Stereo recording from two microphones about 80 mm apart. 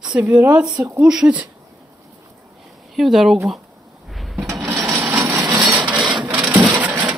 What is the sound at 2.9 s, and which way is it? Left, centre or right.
Speech, centre.